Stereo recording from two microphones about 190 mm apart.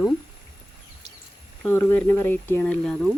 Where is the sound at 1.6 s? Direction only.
10° left (ahead or behind).